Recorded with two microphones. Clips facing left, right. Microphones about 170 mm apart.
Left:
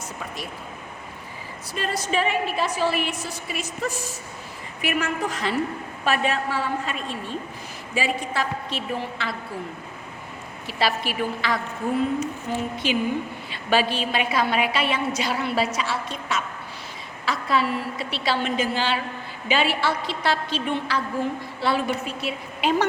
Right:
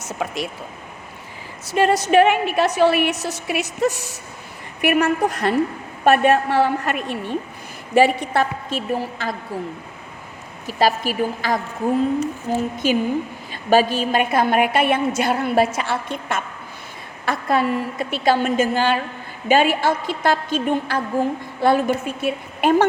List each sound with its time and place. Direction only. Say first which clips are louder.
0.0 s a sound: right 8 dB; 90° right
1.6 s a woman's voice: right 11 dB; 85° right
4.8 s a woman's voice: right 8 dB; 60° right (ahead or behind)
8.9 s a woman's voice: right 5 dB; 40° right (ahead or behind)
10.7 s a woman's voice: right 6 dB; 45° right (ahead or behind)
12.7 s a woman's voice: right 3 dB; 45° right (ahead or behind)